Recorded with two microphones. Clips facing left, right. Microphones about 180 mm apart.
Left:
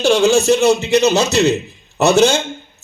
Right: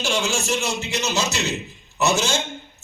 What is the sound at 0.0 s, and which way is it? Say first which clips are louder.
A man's voice: left 12 dB; 60° left (ahead or behind).